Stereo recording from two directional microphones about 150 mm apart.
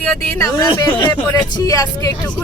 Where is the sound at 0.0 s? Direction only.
15° left (ahead or behind).